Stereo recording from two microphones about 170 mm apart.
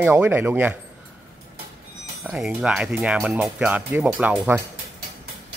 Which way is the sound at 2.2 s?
5° right (ahead or behind).